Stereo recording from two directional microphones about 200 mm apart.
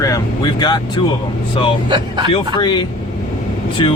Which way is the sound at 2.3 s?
25° left (ahead or behind).